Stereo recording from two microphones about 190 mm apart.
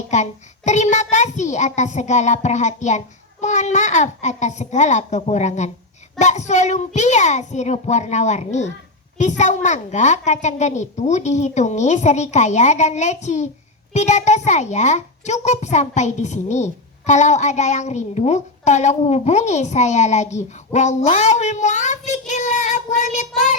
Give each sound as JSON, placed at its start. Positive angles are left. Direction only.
{"t": 0.1, "sound": "a child's voice", "side_deg": 40}
{"t": 22.3, "sound": "child singing", "side_deg": 40}